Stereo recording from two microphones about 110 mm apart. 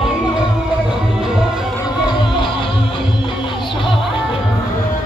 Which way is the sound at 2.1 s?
50° left (ahead or behind).